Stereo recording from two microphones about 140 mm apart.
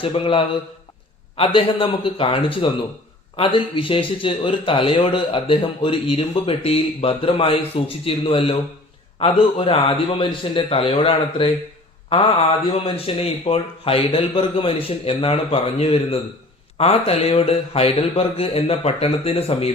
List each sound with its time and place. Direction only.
0.0 s a man's voice: 40° left (ahead or behind)